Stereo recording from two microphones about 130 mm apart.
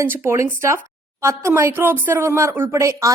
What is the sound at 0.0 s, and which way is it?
Speech, 20° right (ahead or behind).